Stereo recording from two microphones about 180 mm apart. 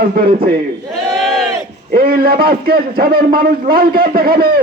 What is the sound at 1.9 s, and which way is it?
A man's voice, 55° right (ahead or behind).